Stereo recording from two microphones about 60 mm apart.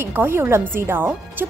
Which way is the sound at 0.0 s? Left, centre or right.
Right.